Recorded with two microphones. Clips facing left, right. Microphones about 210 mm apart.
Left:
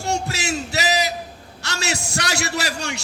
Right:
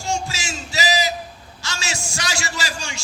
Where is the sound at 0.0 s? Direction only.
60° left (ahead or behind).